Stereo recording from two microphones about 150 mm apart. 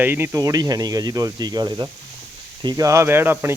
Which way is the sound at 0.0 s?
15° right (ahead or behind).